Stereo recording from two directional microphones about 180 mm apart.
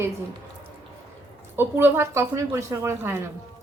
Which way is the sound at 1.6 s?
10° right (ahead or behind).